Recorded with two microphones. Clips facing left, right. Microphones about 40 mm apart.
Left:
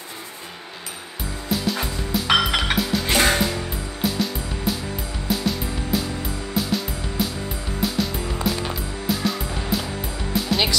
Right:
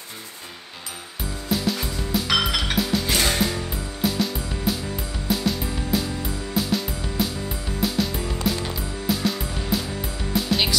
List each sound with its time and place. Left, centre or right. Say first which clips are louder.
1.5 s music: even; centre
2.2 s music: left 5 dB; left
2.8 s music: even; centre
3.1 s music: left 4 dB; left
3.3 s music: left 1 dB; centre